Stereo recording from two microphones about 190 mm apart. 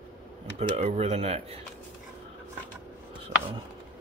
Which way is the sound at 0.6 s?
35° right (ahead or behind).